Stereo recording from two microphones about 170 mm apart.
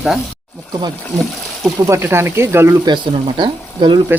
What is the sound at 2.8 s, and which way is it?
Speech, 30° right (ahead or behind).